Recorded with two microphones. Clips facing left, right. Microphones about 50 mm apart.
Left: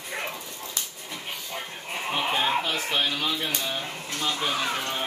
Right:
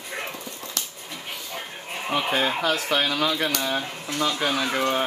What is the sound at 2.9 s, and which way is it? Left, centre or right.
Speech, right.